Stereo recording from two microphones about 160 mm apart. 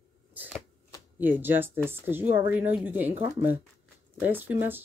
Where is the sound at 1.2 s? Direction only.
10° right (ahead or behind).